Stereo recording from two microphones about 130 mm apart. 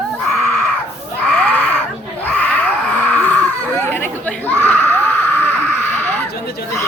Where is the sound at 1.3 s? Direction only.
10° left (ahead or behind).